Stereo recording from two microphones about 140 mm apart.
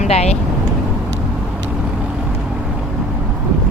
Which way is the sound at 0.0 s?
50° left (ahead or behind).